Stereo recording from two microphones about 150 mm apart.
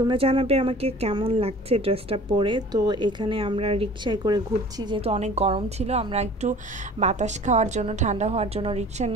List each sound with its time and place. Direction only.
0.1 s speech: 40° right (ahead or behind)
5.0 s a woman's voice: 45° right (ahead or behind)